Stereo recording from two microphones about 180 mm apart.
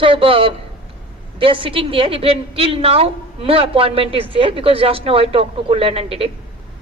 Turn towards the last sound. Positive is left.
turn(degrees=-30)  # may be behind; listen again after turning